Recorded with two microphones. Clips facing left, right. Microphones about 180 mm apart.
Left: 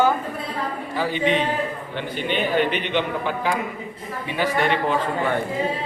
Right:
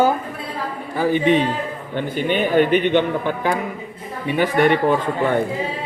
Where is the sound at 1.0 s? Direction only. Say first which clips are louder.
Right 5 dB; 50° right (ahead or behind).